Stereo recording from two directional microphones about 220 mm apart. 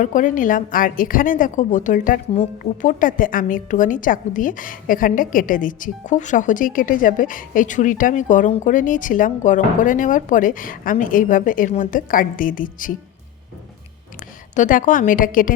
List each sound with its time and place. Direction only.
0.0 s a woman's voice: 35° left (ahead or behind)
14.5 s a woman's voice: 35° left (ahead or behind)